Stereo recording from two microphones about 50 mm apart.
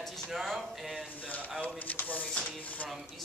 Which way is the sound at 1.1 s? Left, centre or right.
Left.